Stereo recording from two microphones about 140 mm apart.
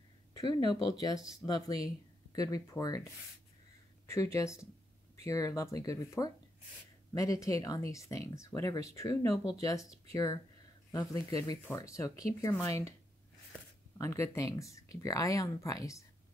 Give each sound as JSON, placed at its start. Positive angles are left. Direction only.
{"t": 0.3, "sound": "speech", "side_deg": 30}
{"t": 4.1, "sound": "speech", "side_deg": 20}
{"t": 13.9, "sound": "speech", "side_deg": 20}